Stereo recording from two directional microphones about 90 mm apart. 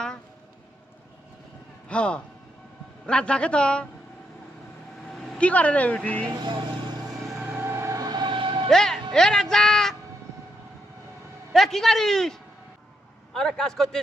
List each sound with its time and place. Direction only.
1.9 s speech: 10° left (ahead or behind)
5.0 s vehicle: centre (ahead or behind)
5.4 s speech: 15° left (ahead or behind)
6.3 s vehicle: 55° right (ahead or behind)
7.6 s music: 30° right (ahead or behind)
7.9 s siren: 50° right (ahead or behind); by 8.7 s 75° right (ahead or behind)
8.7 s a man's voice: 5° left (ahead or behind)
11.5 s a man's voice: 5° left (ahead or behind)